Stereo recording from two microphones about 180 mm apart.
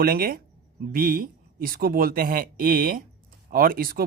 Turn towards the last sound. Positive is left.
turn(degrees=-55)  # may be behind; listen again after turning